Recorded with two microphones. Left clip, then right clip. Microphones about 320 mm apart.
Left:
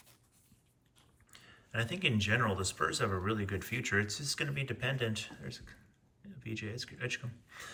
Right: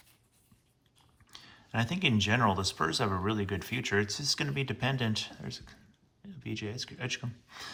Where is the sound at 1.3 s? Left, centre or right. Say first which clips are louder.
Right 3 dB; centre.